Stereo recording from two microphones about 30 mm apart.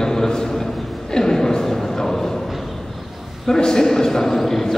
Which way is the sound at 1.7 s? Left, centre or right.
Centre.